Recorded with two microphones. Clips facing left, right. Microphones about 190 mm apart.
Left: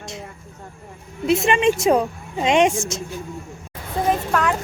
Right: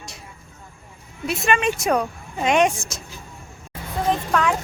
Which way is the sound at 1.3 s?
25° left (ahead or behind).